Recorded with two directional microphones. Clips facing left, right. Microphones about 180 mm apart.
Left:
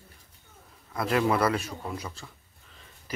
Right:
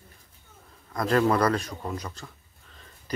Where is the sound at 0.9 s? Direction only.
5° left (ahead or behind).